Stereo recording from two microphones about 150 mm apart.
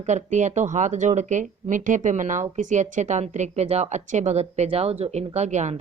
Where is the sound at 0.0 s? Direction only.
50° right (ahead or behind).